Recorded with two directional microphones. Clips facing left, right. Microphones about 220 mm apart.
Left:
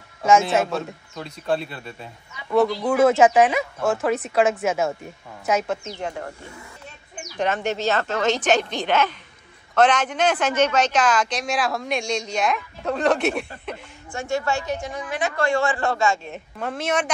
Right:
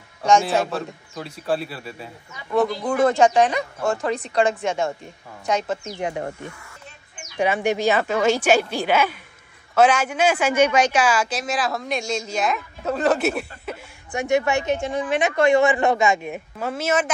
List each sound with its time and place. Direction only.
0.2 s speech: 5° left (ahead or behind)
5.9 s speech: 15° right (ahead or behind)
7.3 s speech: 10° right (ahead or behind)
14.1 s a woman's voice: 20° right (ahead or behind)
16.5 s speech: 5° right (ahead or behind)